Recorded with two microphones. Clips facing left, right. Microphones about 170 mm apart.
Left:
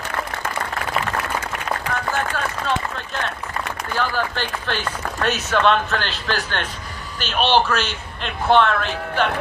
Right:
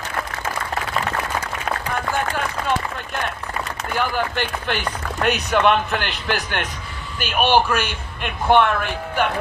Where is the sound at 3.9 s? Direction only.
15° right (ahead or behind).